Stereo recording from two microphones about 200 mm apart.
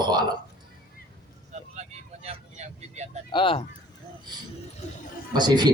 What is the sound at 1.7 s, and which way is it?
Vehicle, 35° right (ahead or behind).